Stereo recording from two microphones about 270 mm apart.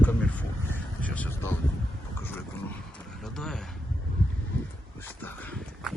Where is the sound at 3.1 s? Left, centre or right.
Centre.